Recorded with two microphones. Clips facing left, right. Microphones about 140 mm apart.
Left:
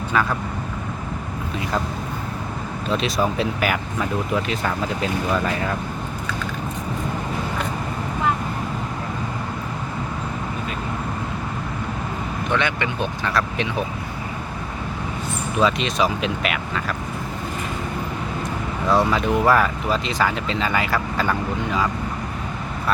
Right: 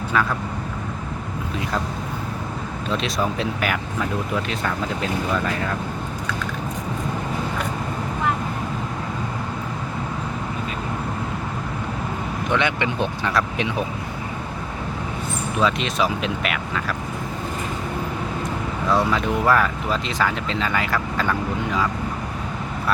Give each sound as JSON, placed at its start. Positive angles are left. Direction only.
{"t": 0.1, "sound": "speech", "side_deg": 5}
{"t": 2.9, "sound": "speech", "side_deg": 5}
{"t": 12.5, "sound": "speech", "side_deg": -20}
{"t": 15.6, "sound": "speech", "side_deg": 0}
{"t": 18.9, "sound": "speech", "side_deg": 5}